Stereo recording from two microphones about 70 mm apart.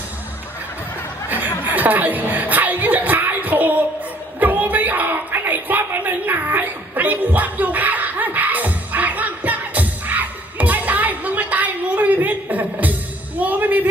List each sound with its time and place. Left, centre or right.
1.7 s music: right
4.4 s a sound: right
13.4 s music: right